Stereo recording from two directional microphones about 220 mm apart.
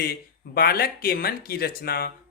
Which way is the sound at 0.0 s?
45° left (ahead or behind).